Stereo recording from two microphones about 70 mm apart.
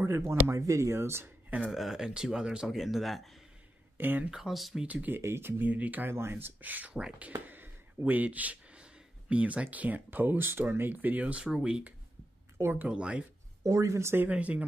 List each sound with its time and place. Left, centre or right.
0.0 s speech: right
1.7 s speech: centre
4.0 s speech: right
4.3 s speech: centre
4.8 s speech: right
5.2 s speech: right; by 11.9 s centre
12.5 s speech: right
12.8 s speech: centre
13.7 s speech: right
14.3 s speech: centre